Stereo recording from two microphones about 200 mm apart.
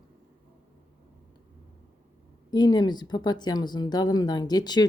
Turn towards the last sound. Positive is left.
turn(degrees=20)  # may be behind; listen again after turning